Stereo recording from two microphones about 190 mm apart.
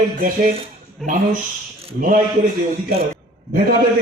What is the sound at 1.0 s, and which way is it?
Speech, centre (ahead or behind).